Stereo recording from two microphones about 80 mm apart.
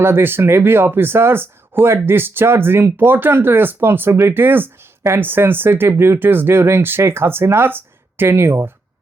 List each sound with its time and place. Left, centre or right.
0.0 s speech: right